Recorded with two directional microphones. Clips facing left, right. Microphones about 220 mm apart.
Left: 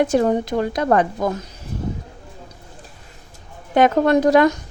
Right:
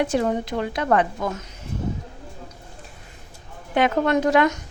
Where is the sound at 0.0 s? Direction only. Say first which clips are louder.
Left 5 dB; 45° left (ahead or behind).